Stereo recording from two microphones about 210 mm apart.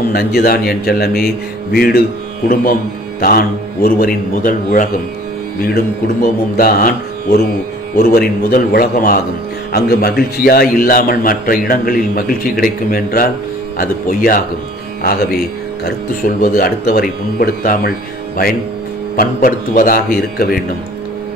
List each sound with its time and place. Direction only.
0.1 s a man's voice: 45° left (ahead or behind)
15.8 s a man's voice: 45° left (ahead or behind)
19.1 s a man's voice: 40° left (ahead or behind)